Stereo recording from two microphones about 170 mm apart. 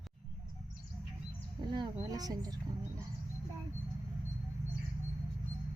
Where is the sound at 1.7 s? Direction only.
25° right (ahead or behind).